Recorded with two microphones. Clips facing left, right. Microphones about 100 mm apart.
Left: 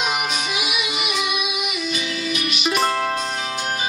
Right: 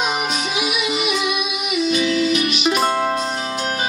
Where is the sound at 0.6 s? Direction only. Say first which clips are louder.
Right 4 dB; 40° right (ahead or behind).